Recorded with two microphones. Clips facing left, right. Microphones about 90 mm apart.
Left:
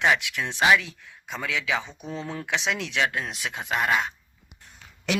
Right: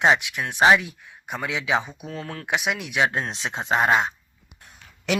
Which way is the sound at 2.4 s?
15° right (ahead or behind).